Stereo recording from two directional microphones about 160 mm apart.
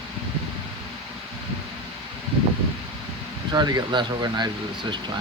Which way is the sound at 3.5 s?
25° right (ahead or behind).